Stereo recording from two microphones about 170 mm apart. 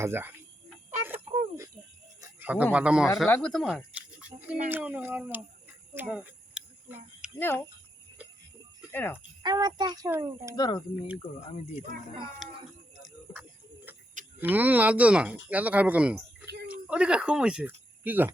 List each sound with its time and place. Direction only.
0.0 s speech: 15° right (ahead or behind)
2.2 s a sound: 10° right (ahead or behind)
2.7 s speech: 5° right (ahead or behind)
3.2 s speech: 5° left (ahead or behind)
3.6 s a sound: 5° right (ahead or behind)
7.3 s speech: 15° left (ahead or behind)
8.9 s speech: 10° left (ahead or behind)
9.4 s a child's voice: 25° right (ahead or behind)
10.5 s speech: 20° left (ahead or behind)
11.2 s speech: 35° left (ahead or behind)
12.4 s speech: centre (ahead or behind)
13.9 s a sound: 10° right (ahead or behind)
14.3 s speech: 10° right (ahead or behind)